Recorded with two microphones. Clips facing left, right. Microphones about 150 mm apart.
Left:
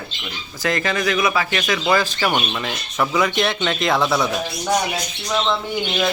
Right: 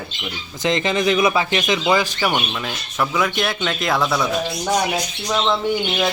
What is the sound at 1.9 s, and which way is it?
Speech, 15° right (ahead or behind).